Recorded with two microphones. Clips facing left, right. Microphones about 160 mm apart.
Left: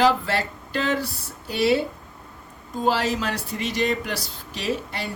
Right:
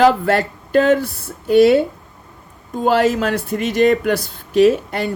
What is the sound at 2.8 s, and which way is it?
Speech, 50° right (ahead or behind).